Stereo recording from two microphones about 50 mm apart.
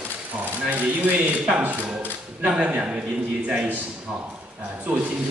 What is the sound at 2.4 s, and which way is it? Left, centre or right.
A man's voice, right.